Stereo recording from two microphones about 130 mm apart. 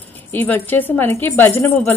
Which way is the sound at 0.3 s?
15° left (ahead or behind).